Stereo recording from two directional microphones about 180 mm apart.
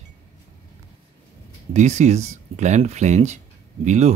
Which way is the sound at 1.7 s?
40° right (ahead or behind).